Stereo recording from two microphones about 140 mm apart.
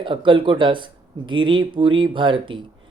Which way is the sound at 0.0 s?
35° right (ahead or behind).